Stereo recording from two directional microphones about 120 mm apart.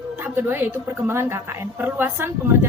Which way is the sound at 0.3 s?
15° right (ahead or behind).